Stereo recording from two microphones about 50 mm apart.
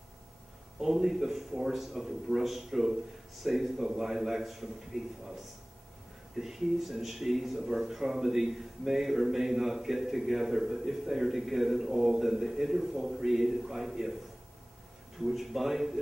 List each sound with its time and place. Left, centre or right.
0.7 s speech: centre
15.1 s speech: centre